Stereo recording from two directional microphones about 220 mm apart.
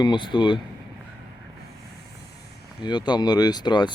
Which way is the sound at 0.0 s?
20° left (ahead or behind).